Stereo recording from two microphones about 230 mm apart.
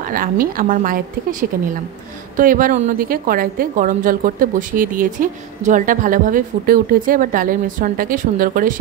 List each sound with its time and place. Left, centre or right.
0.1 s a woman's voice: right
2.3 s a woman's voice: right